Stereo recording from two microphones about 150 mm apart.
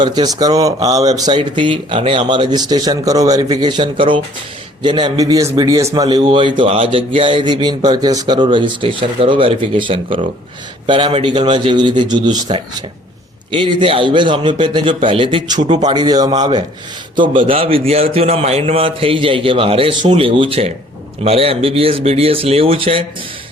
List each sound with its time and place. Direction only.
0.0 s a man's voice: 30° right (ahead or behind)